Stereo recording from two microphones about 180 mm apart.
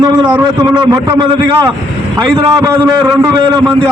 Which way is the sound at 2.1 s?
20° right (ahead or behind).